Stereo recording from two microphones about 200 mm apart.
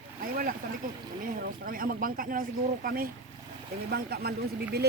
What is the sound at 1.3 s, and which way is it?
Speech, 45° right (ahead or behind).